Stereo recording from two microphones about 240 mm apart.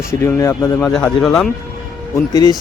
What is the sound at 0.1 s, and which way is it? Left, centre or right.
Speech, centre.